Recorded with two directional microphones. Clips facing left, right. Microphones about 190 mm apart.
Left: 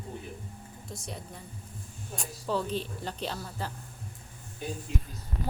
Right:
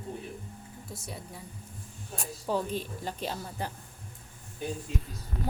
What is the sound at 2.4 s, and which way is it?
Speech, 10° right (ahead or behind).